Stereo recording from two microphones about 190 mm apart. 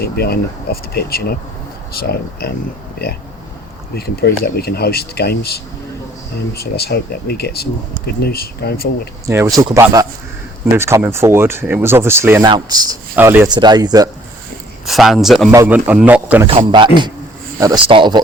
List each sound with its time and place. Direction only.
0.0 s speech: 55° left (ahead or behind)
3.9 s speech: 55° left (ahead or behind)
9.2 s speech: 15° right (ahead or behind)
14.8 s a man's voice: centre (ahead or behind)
16.7 s speech: 25° right (ahead or behind)